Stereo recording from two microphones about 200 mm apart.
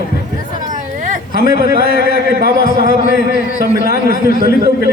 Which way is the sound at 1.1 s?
45° right (ahead or behind).